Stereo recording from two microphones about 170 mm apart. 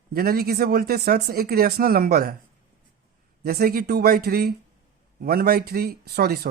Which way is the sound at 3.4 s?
65° right (ahead or behind).